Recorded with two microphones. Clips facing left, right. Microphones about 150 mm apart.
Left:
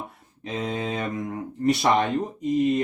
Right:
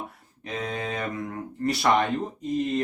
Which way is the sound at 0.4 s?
25° left (ahead or behind).